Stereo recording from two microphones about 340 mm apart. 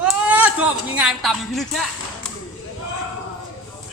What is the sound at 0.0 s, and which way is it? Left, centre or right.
Speech, centre.